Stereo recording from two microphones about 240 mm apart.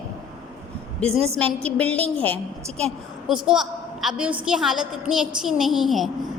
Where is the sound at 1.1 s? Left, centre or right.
Right.